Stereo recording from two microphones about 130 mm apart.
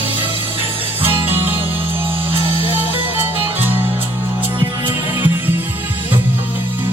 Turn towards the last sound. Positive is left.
turn(degrees=-15)  # may be behind; listen again after turning